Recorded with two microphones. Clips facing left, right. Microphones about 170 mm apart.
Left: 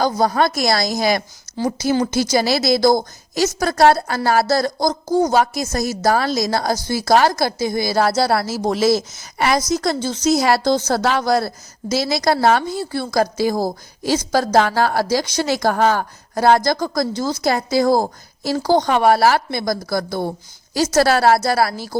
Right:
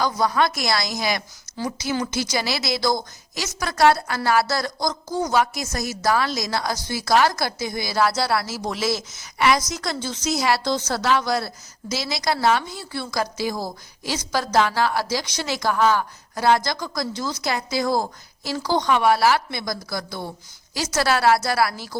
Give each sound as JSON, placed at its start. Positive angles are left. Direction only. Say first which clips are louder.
{"t": 0.0, "sound": "a woman's voice", "louder": "left 4 dB", "side_deg": 40}